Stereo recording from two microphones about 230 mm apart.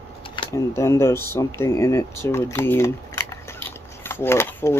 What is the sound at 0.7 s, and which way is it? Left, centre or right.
Speech, centre.